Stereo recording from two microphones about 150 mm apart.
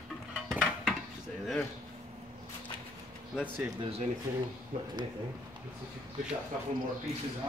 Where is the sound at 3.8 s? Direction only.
40° right (ahead or behind).